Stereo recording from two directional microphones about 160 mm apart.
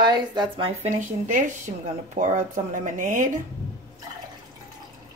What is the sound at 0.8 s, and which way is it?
Speech, 50° right (ahead or behind).